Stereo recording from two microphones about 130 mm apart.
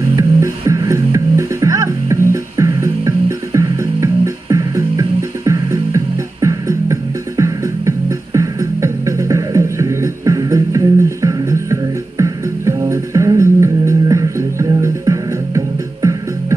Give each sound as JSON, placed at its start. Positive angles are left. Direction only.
{"t": 0.1, "sound": "music", "side_deg": -25}